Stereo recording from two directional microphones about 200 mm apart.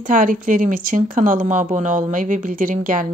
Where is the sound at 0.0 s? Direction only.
40° right (ahead or behind).